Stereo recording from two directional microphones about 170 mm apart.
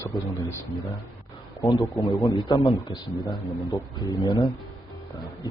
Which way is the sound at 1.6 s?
20° left (ahead or behind).